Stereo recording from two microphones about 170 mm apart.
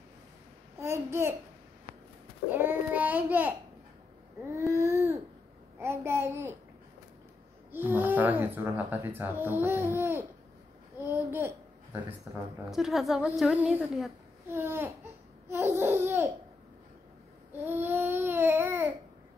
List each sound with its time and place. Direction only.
0.7 s a child's voice: 15° right (ahead or behind)
2.5 s child singing: 10° right (ahead or behind)
4.5 s a sound: 15° right (ahead or behind)
5.8 s child singing: 15° right (ahead or behind)
7.7 s speech: 10° right (ahead or behind)
11.0 s babbling: 15° right (ahead or behind)
12.6 s a woman's voice: centre (ahead or behind)
17.5 s babbling: 10° right (ahead or behind)